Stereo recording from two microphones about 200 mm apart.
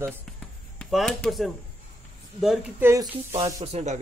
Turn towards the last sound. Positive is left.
turn(degrees=-35)  # may be behind; listen again after turning